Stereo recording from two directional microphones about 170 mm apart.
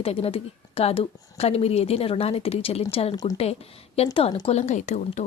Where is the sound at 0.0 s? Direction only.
35° left (ahead or behind).